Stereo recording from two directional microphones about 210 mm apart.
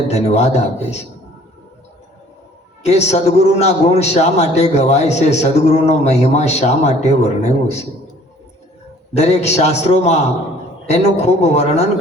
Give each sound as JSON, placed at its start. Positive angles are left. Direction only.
{"t": 0.1, "sound": "a man's voice", "side_deg": 30}
{"t": 2.8, "sound": "a man's voice", "side_deg": 30}
{"t": 9.1, "sound": "a man's voice", "side_deg": 30}